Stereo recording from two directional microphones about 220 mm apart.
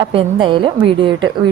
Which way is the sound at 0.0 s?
20° right (ahead or behind).